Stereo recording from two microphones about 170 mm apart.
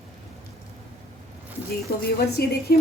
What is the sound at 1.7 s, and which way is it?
Speech, 65° left (ahead or behind).